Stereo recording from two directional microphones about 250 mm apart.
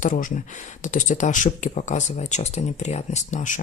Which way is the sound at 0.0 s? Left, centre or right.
Left.